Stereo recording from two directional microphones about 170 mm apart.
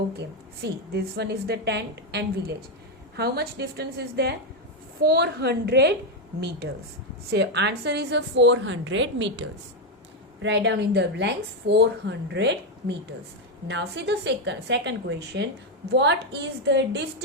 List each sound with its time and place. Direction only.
0.2 s a woman's voice: 70° right (ahead or behind)
7.3 s a woman's voice: 85° right